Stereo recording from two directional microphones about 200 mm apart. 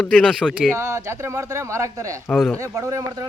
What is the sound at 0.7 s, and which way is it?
Speech, 15° right (ahead or behind).